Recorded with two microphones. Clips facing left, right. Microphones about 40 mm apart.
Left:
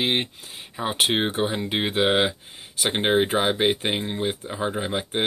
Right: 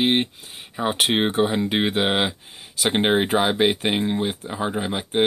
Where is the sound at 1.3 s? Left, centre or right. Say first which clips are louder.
Right 4 dB; right.